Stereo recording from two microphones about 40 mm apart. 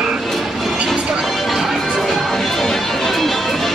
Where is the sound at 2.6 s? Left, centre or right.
Centre.